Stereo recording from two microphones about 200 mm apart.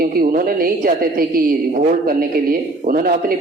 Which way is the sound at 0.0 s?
45° right (ahead or behind).